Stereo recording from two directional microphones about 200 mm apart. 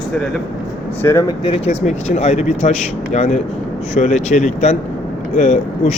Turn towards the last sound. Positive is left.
turn(degrees=35)  # may be behind; listen again after turning